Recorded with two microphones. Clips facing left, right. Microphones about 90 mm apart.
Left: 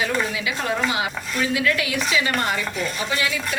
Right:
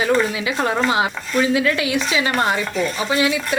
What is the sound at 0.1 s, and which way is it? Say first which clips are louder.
A woman's voice: right 6 dB; 30° right (ahead or behind).